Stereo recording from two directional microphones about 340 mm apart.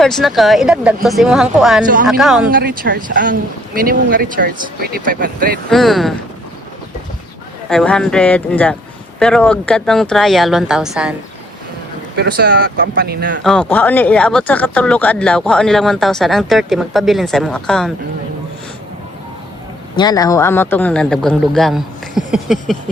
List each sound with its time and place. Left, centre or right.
0.0 s speech: centre
1.8 s speech: right
2.0 s speech: centre
2.5 s speech: right
5.7 s speech: centre
7.7 s speech: centre
12.1 s speech: right
13.4 s speech: centre
20.0 s speech: centre